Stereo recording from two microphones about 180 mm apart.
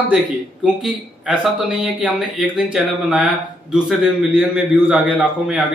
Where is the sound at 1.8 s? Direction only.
5° right (ahead or behind).